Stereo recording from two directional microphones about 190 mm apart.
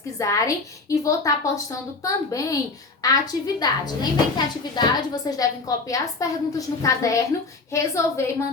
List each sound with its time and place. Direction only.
0.2 s a woman's voice: 15° left (ahead or behind)